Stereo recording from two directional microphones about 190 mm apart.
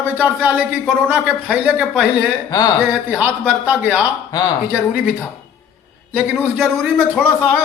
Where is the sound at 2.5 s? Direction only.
20° left (ahead or behind).